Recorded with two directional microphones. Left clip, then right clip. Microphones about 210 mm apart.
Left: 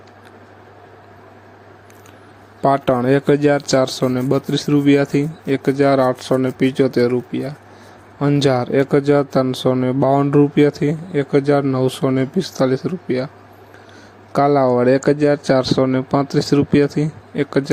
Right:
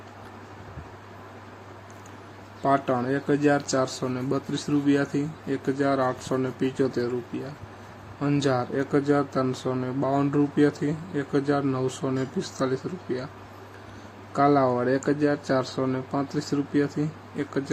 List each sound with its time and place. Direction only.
2.6 s speech: 40° left (ahead or behind)
14.3 s speech: 40° left (ahead or behind)